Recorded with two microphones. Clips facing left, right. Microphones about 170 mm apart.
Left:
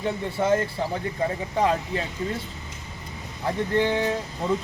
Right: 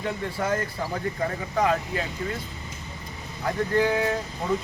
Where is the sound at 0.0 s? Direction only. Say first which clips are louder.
Left 3 dB; 25° left (ahead or behind).